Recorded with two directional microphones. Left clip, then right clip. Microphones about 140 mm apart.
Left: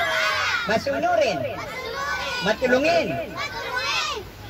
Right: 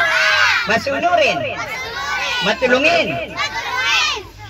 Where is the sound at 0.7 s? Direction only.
25° left (ahead or behind).